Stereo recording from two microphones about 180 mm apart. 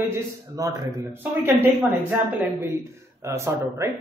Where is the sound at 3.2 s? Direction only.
15° right (ahead or behind).